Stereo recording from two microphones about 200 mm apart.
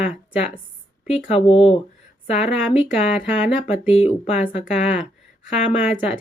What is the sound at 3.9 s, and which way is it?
Speech, 30° left (ahead or behind).